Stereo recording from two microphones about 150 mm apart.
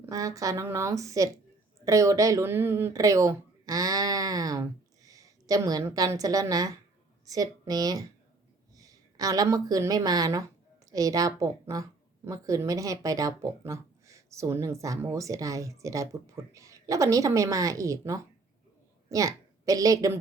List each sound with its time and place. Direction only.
0.0 s a woman's voice: 20° right (ahead or behind)